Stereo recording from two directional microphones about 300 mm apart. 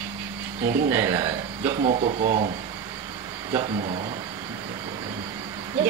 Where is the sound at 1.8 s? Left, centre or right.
Right.